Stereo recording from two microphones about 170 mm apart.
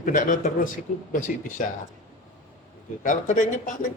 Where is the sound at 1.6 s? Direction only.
55° left (ahead or behind).